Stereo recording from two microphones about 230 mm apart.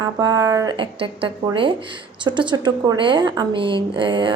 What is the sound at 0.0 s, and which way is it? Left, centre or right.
A woman's voice, centre.